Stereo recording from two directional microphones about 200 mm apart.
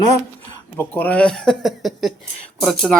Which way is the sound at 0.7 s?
10° left (ahead or behind).